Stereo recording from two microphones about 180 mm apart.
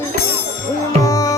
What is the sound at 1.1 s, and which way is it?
Music, 20° left (ahead or behind).